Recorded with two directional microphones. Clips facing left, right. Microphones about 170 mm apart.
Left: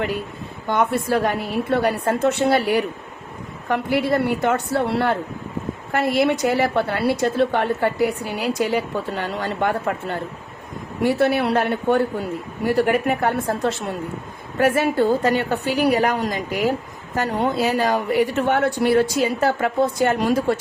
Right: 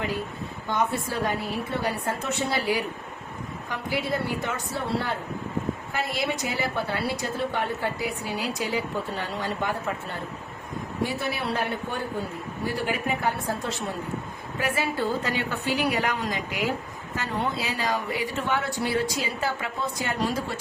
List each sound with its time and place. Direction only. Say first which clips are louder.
0.7 s a woman's voice: left 7 dB; 65° left (ahead or behind)
11.0 s a woman's voice: left 11 dB; 70° left (ahead or behind)
14.6 s a woman's voice: left 10 dB; 55° left (ahead or behind)
15.2 s a woman's voice: left 9 dB; 45° left (ahead or behind)
17.7 s a woman's voice: left 8 dB; 55° left (ahead or behind)